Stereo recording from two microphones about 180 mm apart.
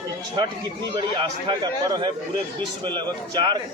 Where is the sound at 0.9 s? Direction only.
25° right (ahead or behind).